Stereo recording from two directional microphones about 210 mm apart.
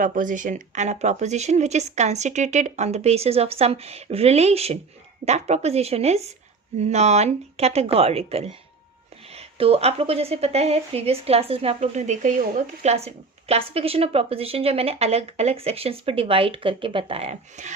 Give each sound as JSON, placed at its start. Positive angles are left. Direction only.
{"t": 0.0, "sound": "a woman's voice", "side_deg": -40}